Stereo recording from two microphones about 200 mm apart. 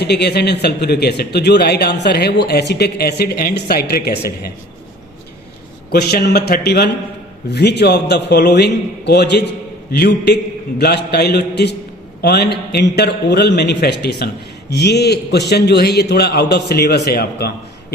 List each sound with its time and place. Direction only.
0.0 s a man's voice: 55° left (ahead or behind)
5.9 s a man's voice: 50° left (ahead or behind)